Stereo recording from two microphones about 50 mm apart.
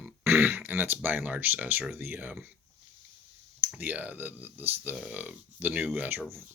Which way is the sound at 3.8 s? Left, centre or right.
Right.